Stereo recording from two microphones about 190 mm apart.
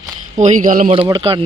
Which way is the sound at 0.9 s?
25° right (ahead or behind).